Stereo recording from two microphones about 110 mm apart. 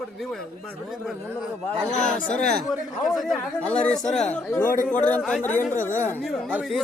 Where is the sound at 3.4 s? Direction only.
10° left (ahead or behind).